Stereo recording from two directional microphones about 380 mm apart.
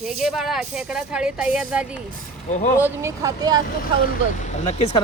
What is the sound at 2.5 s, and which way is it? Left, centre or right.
Speech, centre.